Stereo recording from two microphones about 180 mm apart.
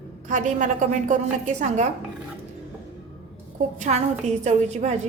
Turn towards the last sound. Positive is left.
turn(degrees=-40)  # may be behind; listen again after turning